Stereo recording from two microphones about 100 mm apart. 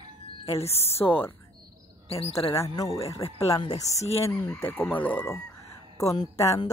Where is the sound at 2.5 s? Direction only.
35° left (ahead or behind).